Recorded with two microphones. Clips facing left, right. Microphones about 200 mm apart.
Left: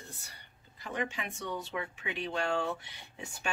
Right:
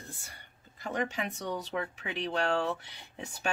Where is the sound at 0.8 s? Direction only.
40° right (ahead or behind).